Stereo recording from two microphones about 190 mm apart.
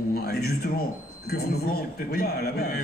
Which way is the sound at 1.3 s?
55° left (ahead or behind).